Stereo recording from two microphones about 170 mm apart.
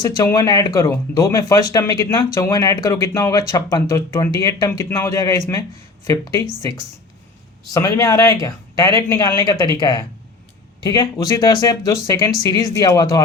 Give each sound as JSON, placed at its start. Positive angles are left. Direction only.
{"t": 0.3, "sound": "speech", "side_deg": 20}
{"t": 7.7, "sound": "speech", "side_deg": 20}